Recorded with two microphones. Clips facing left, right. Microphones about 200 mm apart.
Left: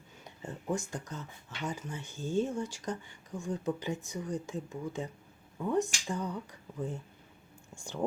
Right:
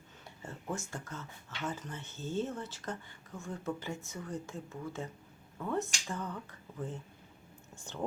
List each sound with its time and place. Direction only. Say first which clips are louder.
0.3 s speech: left 5 dB; 15° left (ahead or behind)